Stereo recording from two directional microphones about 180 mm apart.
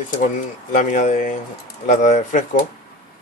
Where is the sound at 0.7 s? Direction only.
45° left (ahead or behind).